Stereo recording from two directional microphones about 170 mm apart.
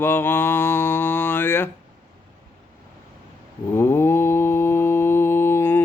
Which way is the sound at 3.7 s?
15° left (ahead or behind).